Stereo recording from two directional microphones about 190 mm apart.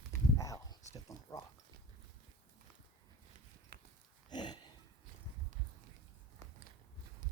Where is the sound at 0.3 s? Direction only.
20° left (ahead or behind).